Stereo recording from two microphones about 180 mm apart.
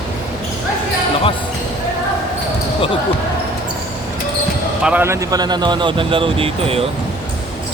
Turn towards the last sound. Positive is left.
turn(degrees=-30)  # may be behind; listen again after turning